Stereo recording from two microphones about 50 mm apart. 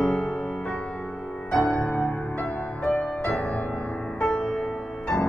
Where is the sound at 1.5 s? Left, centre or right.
Centre.